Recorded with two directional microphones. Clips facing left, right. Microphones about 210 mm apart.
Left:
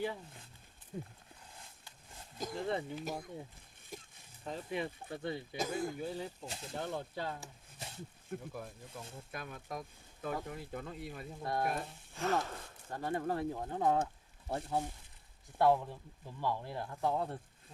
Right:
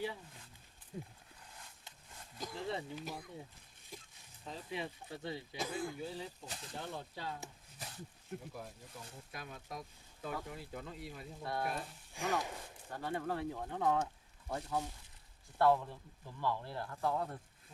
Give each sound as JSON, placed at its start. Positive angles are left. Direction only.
{"t": 0.9, "sound": "speech", "side_deg": 50}
{"t": 2.4, "sound": "a sound", "side_deg": 50}
{"t": 4.4, "sound": "speech", "side_deg": 55}
{"t": 6.4, "sound": "speech", "side_deg": 25}
{"t": 6.7, "sound": "speech", "side_deg": 55}
{"t": 7.8, "sound": "snake", "side_deg": 25}
{"t": 8.3, "sound": "speech", "side_deg": 50}
{"t": 12.1, "sound": "sigh", "side_deg": -15}
{"t": 13.0, "sound": "speech", "side_deg": 45}
{"t": 15.5, "sound": "speech", "side_deg": 15}